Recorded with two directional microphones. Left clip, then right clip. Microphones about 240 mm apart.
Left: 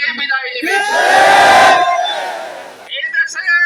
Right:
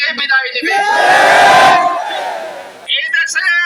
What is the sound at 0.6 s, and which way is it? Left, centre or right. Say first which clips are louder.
Speech: left 1 dB; left.